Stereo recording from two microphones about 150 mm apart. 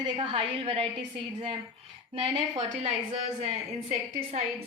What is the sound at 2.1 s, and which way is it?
Speech, 40° right (ahead or behind).